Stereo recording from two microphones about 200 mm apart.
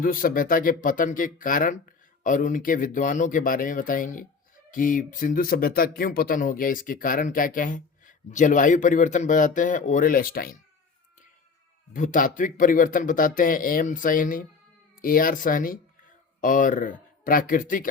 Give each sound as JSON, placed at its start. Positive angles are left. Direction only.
{"t": 0.0, "sound": "speech", "side_deg": 45}
{"t": 11.9, "sound": "speech", "side_deg": 40}